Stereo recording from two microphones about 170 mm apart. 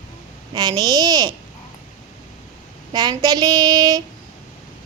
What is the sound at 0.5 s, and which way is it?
Speech, 25° right (ahead or behind).